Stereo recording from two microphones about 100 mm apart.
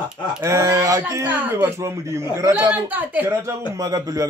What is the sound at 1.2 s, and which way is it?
Speech, 20° right (ahead or behind).